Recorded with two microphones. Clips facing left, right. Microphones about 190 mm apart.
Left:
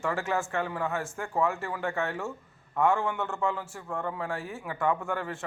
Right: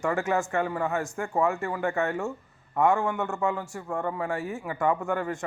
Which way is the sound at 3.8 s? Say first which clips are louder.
Right 3 dB; 10° right (ahead or behind).